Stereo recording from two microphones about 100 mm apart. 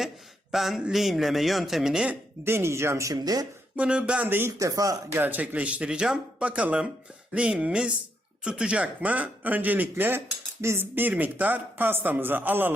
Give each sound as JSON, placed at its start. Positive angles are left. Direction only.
{"t": 0.5, "sound": "a man's voice", "side_deg": -5}
{"t": 2.4, "sound": "speech", "side_deg": -25}
{"t": 3.8, "sound": "speech", "side_deg": -10}
{"t": 4.5, "sound": "speech", "side_deg": -35}
{"t": 5.2, "sound": "speech", "side_deg": -20}